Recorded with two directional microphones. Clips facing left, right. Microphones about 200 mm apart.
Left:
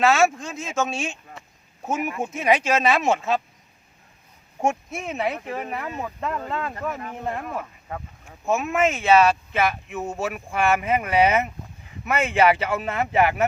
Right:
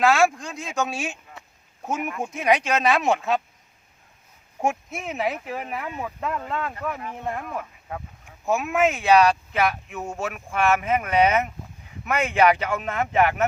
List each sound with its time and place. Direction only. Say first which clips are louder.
0.0 s speech: even; centre (ahead or behind)
4.6 s speech: left 1 dB; centre (ahead or behind)